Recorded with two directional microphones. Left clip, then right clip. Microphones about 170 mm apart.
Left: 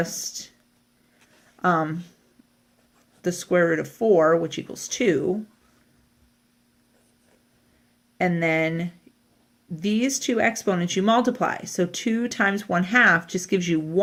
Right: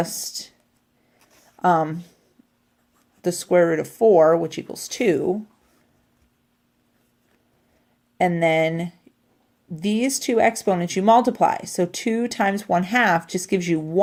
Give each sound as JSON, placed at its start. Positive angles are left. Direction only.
{"t": 1.5, "sound": "speech", "side_deg": -35}
{"t": 3.2, "sound": "speech", "side_deg": -35}
{"t": 8.2, "sound": "speech", "side_deg": -35}